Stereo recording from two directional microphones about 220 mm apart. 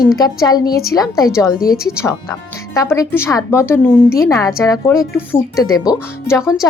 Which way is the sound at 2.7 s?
15° left (ahead or behind).